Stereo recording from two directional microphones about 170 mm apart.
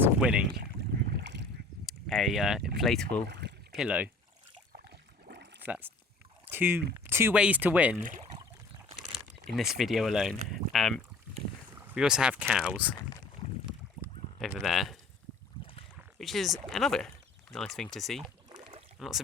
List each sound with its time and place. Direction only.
0.0 s boat: 5° right (ahead or behind)
0.5 s boat: 70° right (ahead or behind); by 1.5 s 90° right
1.9 s speech: centre (ahead or behind)
3.2 s a sound: 80° right
3.8 s speech: 10° right (ahead or behind)
5.3 s a sound: 80° right
5.6 s speech: 10° right (ahead or behind)
9.6 s speech: centre (ahead or behind)
14.3 s speech: centre (ahead or behind)
15.6 s boat: 25° left (ahead or behind)
16.1 s speech: centre (ahead or behind)